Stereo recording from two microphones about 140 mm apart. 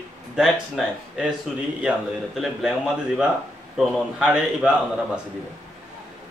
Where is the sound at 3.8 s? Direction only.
5° right (ahead or behind).